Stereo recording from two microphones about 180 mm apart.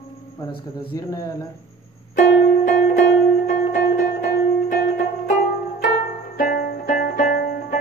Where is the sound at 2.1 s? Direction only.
45° left (ahead or behind).